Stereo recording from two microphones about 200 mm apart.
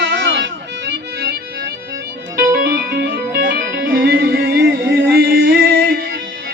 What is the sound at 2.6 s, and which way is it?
Music, 50° right (ahead or behind).